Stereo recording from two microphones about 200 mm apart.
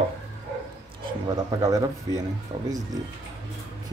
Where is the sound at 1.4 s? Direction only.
15° right (ahead or behind).